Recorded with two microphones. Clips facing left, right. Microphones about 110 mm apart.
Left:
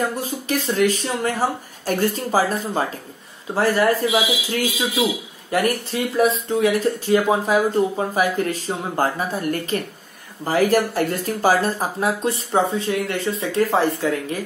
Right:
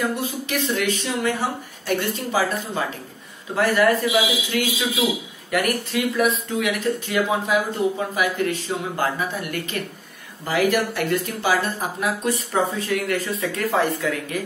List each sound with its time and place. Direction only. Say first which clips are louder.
0.0 s speech: left 1 dB; 40° left (ahead or behind)